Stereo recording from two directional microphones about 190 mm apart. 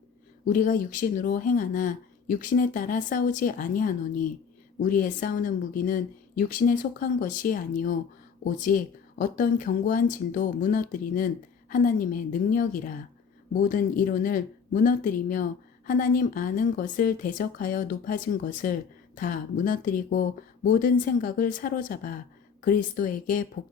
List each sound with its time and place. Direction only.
0.4 s speech: 45° left (ahead or behind)